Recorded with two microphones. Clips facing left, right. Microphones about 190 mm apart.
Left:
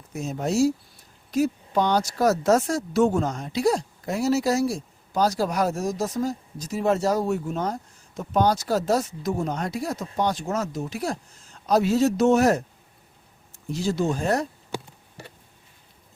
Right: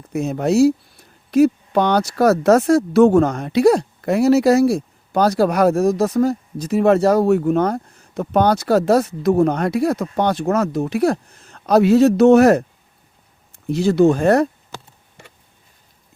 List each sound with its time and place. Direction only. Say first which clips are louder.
0.1 s speech: right 8 dB; 65° right (ahead or behind)
13.7 s speech: right 11 dB; 65° right (ahead or behind)
14.7 s a sound: left 5 dB; 15° left (ahead or behind)